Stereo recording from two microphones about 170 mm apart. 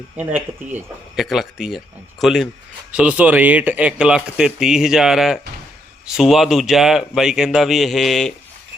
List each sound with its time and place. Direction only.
0.2 s speech: 10° right (ahead or behind)